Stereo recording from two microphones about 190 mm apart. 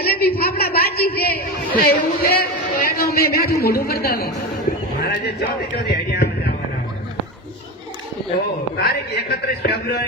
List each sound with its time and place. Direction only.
0.0 s a sound: 55° left (ahead or behind)
4.9 s a man's voice: 60° left (ahead or behind)
8.8 s a man's voice: 60° left (ahead or behind)